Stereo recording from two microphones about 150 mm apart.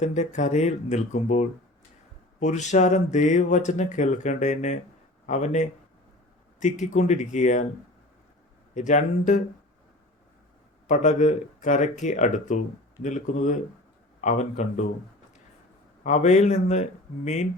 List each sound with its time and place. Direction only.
0.0 s speech: 50° left (ahead or behind)
8.7 s speech: 55° left (ahead or behind)
10.8 s speech: 55° left (ahead or behind)
16.0 s speech: 50° left (ahead or behind)